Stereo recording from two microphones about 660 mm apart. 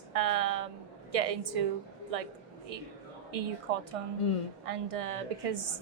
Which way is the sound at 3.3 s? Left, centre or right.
Right.